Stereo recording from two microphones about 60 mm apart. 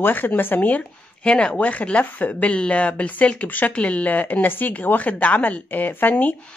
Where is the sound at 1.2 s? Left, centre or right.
Centre.